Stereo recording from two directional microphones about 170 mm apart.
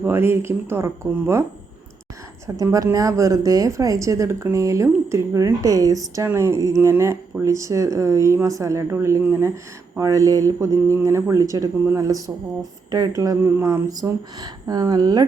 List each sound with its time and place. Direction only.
0.0 s speech: 15° right (ahead or behind)
2.6 s speech: 20° right (ahead or behind)